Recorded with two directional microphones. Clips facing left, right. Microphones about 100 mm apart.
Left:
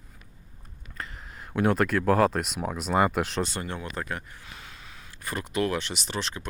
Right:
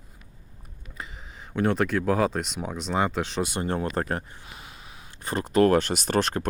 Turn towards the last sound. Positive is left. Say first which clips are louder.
# right 9 dB
turn(degrees=-50)  # may be behind; listen again after turning